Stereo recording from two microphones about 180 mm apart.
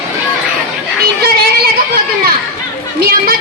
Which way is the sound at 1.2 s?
55° right (ahead or behind).